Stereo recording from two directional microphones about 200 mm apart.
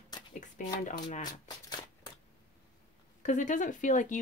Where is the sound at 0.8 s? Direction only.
40° left (ahead or behind).